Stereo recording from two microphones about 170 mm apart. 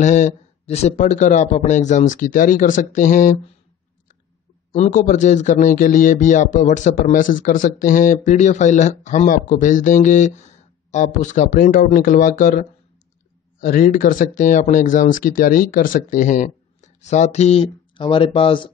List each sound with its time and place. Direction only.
0.0 s a man's voice: 45° left (ahead or behind)
4.7 s a man's voice: 45° left (ahead or behind); by 18.7 s 30° left (ahead or behind)